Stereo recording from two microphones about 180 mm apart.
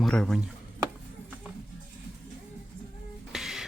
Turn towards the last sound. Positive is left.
turn(degrees=0)  # may be behind; listen again after turning